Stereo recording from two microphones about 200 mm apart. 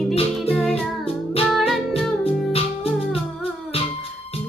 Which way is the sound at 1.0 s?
30° left (ahead or behind).